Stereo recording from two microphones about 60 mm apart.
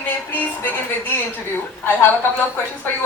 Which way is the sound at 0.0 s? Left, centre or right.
Left.